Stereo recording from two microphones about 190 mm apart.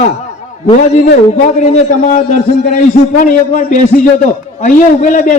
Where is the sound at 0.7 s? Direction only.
40° left (ahead or behind).